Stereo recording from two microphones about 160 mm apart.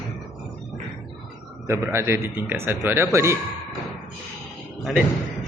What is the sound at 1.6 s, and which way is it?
A man's voice, 15° right (ahead or behind).